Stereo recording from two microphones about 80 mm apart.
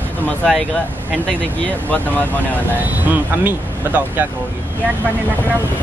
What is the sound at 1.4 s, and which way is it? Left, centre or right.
Speech, centre.